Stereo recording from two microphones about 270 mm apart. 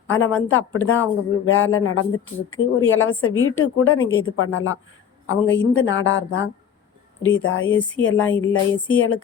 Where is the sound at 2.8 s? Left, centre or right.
Left.